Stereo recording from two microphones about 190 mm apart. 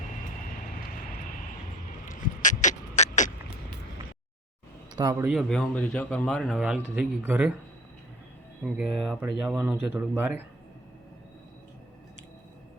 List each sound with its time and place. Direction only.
2.0 s a sound: 40° left (ahead or behind)
5.2 s speech: centre (ahead or behind)
8.6 s speech: 5° right (ahead or behind)